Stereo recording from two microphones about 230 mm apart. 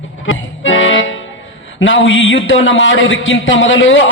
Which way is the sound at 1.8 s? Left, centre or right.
Left.